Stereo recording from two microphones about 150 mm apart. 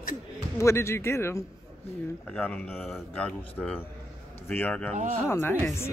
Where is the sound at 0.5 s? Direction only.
20° left (ahead or behind).